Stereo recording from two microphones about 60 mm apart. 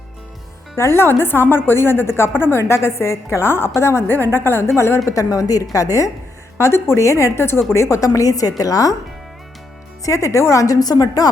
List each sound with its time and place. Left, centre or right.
0.8 s a woman's voice: left
4.1 s a woman's voice: left
5.0 s speech: left
5.7 s speech: left
6.6 s a woman's voice: left
10.0 s speech: left